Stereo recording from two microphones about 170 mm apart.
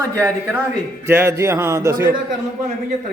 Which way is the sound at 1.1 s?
15° right (ahead or behind).